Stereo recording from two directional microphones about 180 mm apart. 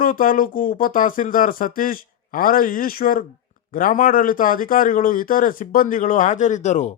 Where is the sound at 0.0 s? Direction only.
50° left (ahead or behind).